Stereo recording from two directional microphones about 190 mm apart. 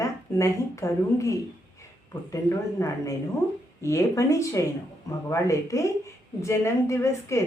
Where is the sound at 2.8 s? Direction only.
15° left (ahead or behind).